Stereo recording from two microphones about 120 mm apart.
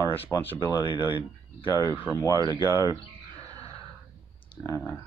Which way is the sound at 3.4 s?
30° right (ahead or behind).